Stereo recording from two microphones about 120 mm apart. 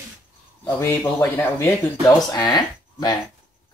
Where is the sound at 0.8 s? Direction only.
20° left (ahead or behind).